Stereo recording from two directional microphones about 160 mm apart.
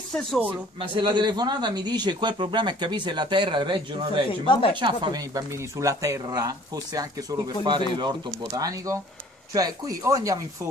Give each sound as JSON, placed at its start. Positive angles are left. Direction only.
{"t": 0.1, "sound": "speech", "side_deg": 5}
{"t": 0.7, "sound": "speech", "side_deg": -30}
{"t": 4.3, "sound": "speech", "side_deg": 30}
{"t": 4.7, "sound": "speech", "side_deg": -30}